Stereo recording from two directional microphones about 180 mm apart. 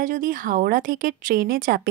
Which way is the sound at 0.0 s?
50° right (ahead or behind).